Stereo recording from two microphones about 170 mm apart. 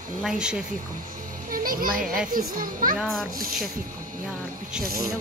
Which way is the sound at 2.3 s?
55° right (ahead or behind).